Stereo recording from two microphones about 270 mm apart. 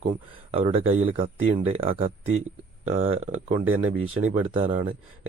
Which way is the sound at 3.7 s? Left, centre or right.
Right.